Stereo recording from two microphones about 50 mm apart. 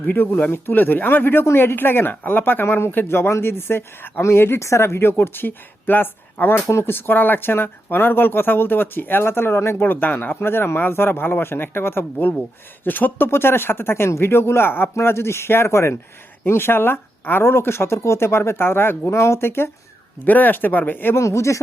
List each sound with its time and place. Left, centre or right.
0.0 s speech: left
4.2 s speech: left
4.6 s speech: left
9.8 s speech: left
19.0 s speech: left
20.2 s speech: left
21.1 s speech: left